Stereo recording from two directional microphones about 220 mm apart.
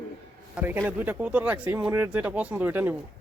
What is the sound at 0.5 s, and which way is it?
Speech, 10° right (ahead or behind).